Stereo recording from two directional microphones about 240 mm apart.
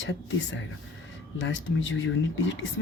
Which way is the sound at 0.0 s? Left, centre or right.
Left.